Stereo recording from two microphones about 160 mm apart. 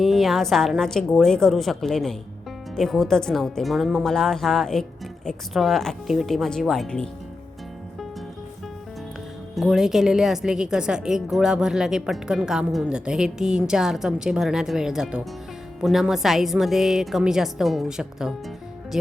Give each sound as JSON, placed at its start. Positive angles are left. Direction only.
{"t": 0.0, "sound": "a woman's voice", "side_deg": 0}
{"t": 9.6, "sound": "a woman's voice", "side_deg": 0}